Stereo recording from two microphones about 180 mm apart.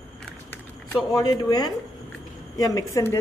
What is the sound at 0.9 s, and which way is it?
A woman's voice, 20° left (ahead or behind).